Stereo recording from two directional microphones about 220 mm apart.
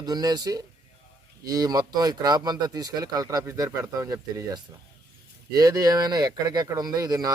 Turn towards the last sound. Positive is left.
turn(degrees=-15)  # may be behind; listen again after turning